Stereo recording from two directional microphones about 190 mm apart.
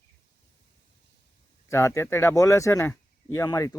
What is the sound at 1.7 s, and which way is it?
Speech, 15° left (ahead or behind).